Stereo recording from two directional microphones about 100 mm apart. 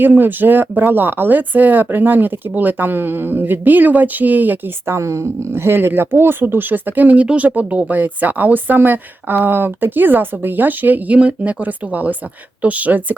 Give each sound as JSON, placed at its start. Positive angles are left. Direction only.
{"t": 0.0, "sound": "speech", "side_deg": -20}